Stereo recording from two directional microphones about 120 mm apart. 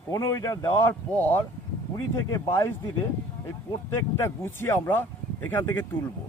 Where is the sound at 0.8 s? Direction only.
15° left (ahead or behind).